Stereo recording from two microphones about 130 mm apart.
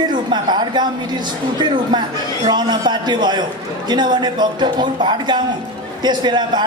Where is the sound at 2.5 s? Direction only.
35° right (ahead or behind).